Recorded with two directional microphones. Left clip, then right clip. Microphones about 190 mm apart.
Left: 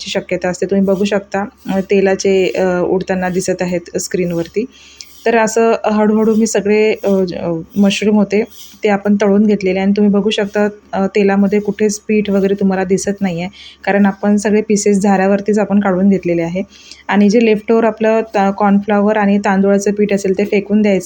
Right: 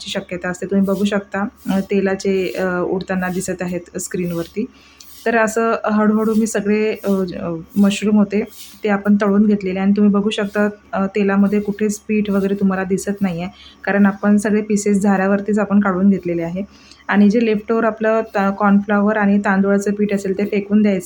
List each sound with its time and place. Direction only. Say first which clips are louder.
0.0 s speech: left 7 dB; 15° left (ahead or behind)